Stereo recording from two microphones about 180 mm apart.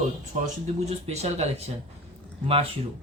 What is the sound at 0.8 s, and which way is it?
Speech, 35° right (ahead or behind).